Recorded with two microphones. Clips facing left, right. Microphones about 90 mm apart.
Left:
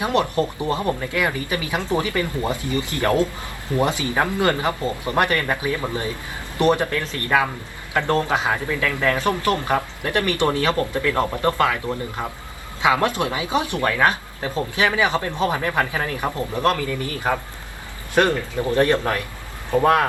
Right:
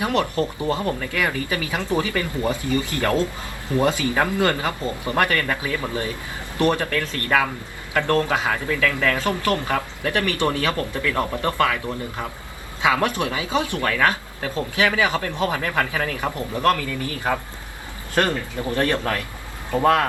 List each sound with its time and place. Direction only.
0.0 s speech: 20° left (ahead or behind)
18.1 s speech: 20° left (ahead or behind)